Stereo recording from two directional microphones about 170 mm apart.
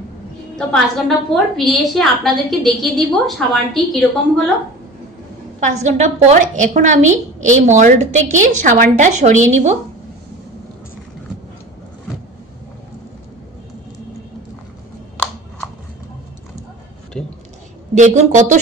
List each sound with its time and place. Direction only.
0.6 s a woman's voice: 5° left (ahead or behind)
5.6 s a woman's voice: 45° right (ahead or behind)
17.1 s a sound: 5° left (ahead or behind)
17.9 s a woman's voice: 45° right (ahead or behind)